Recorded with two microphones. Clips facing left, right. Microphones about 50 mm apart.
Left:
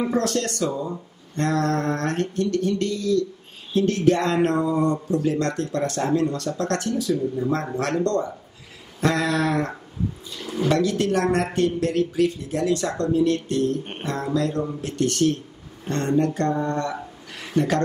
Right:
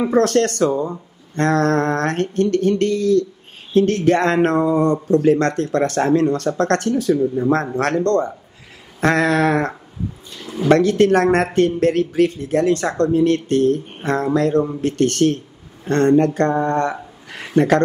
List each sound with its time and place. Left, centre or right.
0.1 s speech: right
10.4 s a sound: centre
10.7 s speech: right